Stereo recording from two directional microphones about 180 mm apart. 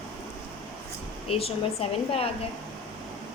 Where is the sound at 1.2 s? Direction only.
35° left (ahead or behind).